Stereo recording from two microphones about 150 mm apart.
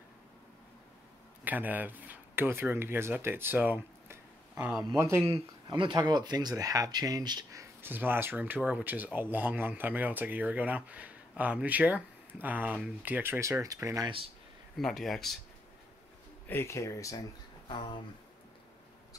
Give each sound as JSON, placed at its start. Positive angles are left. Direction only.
{"t": 1.4, "sound": "speech", "side_deg": -10}
{"t": 5.7, "sound": "speech", "side_deg": -30}
{"t": 7.8, "sound": "speech", "side_deg": -15}
{"t": 14.8, "sound": "speech", "side_deg": 0}
{"t": 16.4, "sound": "speech", "side_deg": 15}